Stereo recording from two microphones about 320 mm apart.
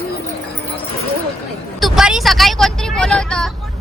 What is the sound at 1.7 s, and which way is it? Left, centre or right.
Speech, centre.